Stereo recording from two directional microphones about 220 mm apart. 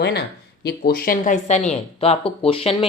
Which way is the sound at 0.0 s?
50° left (ahead or behind).